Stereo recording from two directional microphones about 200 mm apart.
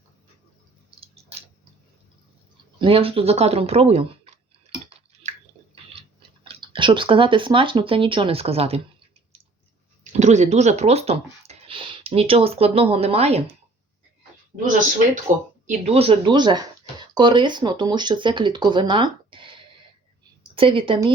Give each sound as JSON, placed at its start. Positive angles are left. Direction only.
{"t": 0.9, "sound": "a sound", "side_deg": -25}
{"t": 2.7, "sound": "speech", "side_deg": -25}
{"t": 6.0, "sound": "speech", "side_deg": -25}
{"t": 10.0, "sound": "speech", "side_deg": -35}
{"t": 14.6, "sound": "speech", "side_deg": -40}
{"t": 15.6, "sound": "speech", "side_deg": -30}